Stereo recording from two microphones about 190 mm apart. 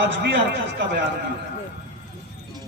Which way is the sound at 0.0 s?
65° right (ahead or behind).